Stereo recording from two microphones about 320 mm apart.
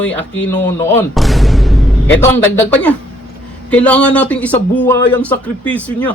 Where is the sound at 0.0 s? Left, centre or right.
Centre.